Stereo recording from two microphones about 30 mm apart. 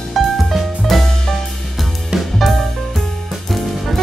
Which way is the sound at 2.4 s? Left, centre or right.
Centre.